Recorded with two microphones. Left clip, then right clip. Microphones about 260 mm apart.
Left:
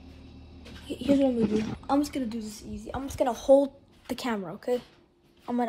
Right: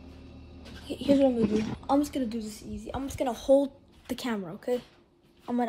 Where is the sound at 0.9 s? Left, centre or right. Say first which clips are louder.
Right 1 dB; centre.